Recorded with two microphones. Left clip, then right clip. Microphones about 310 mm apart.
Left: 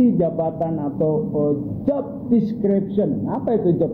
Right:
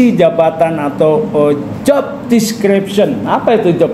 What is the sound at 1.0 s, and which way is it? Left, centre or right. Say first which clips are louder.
Speech: right 10 dB; right.